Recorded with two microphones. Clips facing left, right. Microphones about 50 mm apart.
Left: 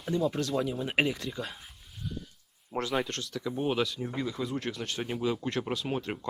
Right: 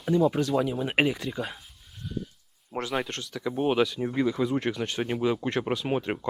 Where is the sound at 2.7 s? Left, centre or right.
Centre.